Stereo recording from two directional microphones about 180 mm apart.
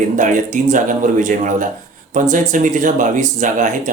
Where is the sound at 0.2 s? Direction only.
45° right (ahead or behind).